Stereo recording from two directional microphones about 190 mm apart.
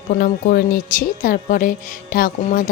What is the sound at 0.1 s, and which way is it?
A woman's voice, 50° left (ahead or behind).